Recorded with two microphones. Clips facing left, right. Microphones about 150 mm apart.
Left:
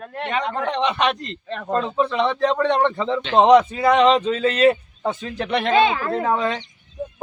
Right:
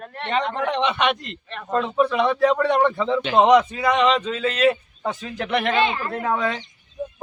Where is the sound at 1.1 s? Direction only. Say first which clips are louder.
Left 1 dB; 5° right (ahead or behind).